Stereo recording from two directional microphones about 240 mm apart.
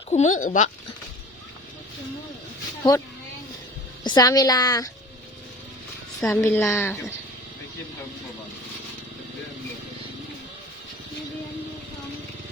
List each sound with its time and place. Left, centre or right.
0.1 s speech: left
4.0 s a woman's voice: centre
6.1 s a woman's voice: centre